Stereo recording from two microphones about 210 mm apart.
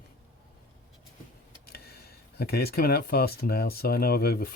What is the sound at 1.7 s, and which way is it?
Speech, 45° left (ahead or behind).